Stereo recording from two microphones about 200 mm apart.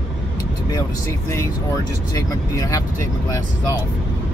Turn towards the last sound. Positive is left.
turn(degrees=15)  # may be behind; listen again after turning